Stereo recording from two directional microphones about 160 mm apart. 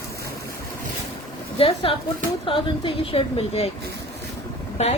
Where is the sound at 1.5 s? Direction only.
35° left (ahead or behind).